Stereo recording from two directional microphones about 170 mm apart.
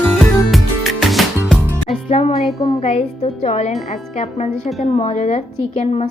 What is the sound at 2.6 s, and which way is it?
Speech, 40° left (ahead or behind).